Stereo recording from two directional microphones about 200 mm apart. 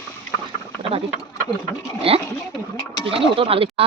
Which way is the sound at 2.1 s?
30° right (ahead or behind).